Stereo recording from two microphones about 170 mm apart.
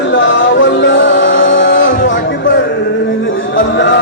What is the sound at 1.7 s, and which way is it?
Music, 55° left (ahead or behind).